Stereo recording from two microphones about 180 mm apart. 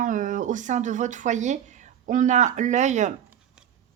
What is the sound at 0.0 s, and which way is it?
Speech, 45° right (ahead or behind).